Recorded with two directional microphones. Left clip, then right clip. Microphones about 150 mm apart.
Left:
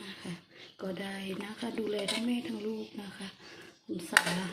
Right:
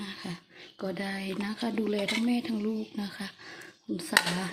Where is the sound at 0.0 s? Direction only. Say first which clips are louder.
Right 4 dB; 35° right (ahead or behind).